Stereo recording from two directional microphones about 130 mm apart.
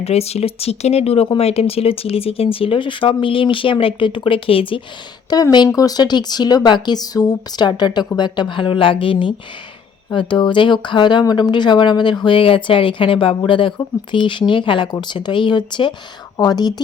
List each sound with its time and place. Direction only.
0.0 s speech: 55° left (ahead or behind)
5.3 s speech: 30° left (ahead or behind)